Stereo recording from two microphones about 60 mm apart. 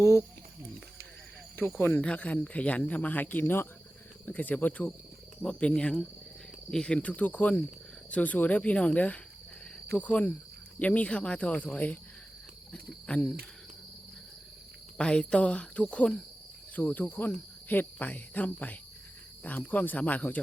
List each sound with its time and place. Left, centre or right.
0.0 s speech: left
2.0 s cricket: left
4.3 s cricket: left
5.4 s speech: centre
6.7 s cricket: centre
14.9 s cricket: centre